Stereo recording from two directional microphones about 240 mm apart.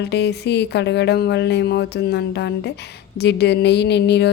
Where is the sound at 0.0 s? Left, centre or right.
Left.